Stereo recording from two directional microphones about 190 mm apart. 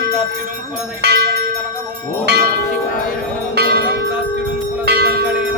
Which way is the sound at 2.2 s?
60° right (ahead or behind).